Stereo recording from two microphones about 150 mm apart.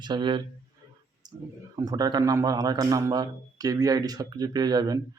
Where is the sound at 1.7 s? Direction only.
25° right (ahead or behind).